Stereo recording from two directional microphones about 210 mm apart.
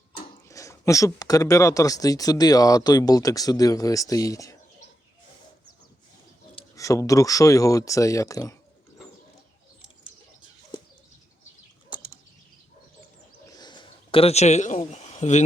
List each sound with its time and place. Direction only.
0.4 s speech: 15° left (ahead or behind)
6.6 s speech: 15° left (ahead or behind)
13.6 s a sound: 20° left (ahead or behind)